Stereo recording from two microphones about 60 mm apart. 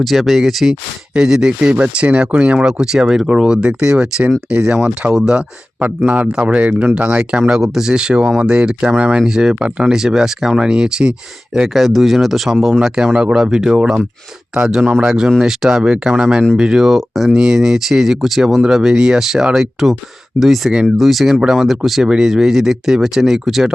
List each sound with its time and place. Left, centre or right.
0.0 s speech: centre
1.7 s speech: right
7.6 s speech: centre